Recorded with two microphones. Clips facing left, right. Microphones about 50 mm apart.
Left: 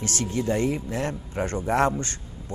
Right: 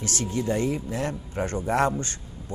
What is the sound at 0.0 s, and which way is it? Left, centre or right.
A man's voice, left.